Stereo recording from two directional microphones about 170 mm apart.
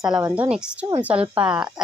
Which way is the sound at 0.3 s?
5° right (ahead or behind).